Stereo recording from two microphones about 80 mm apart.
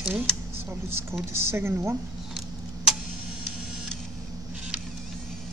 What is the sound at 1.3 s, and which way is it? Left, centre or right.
Speech, right.